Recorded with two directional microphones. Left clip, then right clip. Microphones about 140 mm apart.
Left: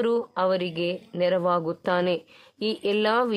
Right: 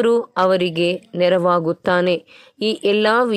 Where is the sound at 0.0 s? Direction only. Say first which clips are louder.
Right 8 dB; 40° right (ahead or behind).